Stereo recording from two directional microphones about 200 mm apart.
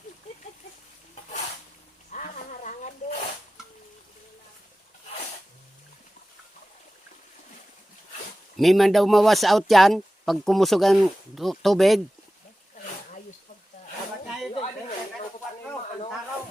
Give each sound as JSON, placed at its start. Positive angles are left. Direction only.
{"t": 2.0, "sound": "a sound", "side_deg": 40}
{"t": 8.5, "sound": "speech", "side_deg": 0}
{"t": 14.5, "sound": "snake", "side_deg": 35}